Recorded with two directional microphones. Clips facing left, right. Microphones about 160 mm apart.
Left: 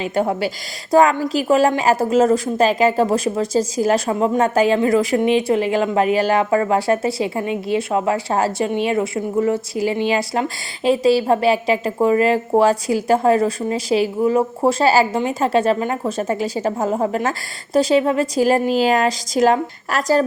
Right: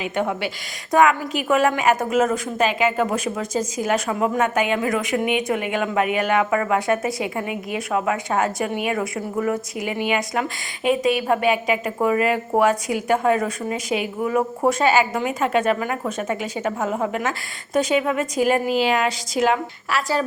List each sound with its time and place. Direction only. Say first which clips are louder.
0.0 s a woman's voice: left 4 dB; 35° left (ahead or behind)